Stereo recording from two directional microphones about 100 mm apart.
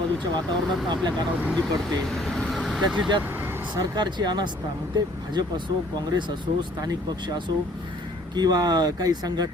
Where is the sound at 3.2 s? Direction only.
20° right (ahead or behind).